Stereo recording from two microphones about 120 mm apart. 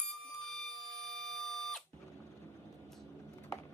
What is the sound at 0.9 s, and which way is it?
Alarm clock, 5° left (ahead or behind).